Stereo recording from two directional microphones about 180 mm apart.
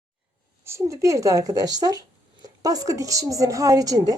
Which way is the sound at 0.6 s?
15° right (ahead or behind).